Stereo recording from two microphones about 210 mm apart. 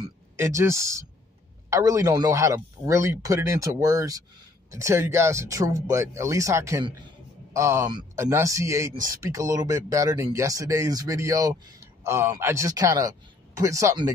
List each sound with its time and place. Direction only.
0.0 s speech: 15° right (ahead or behind)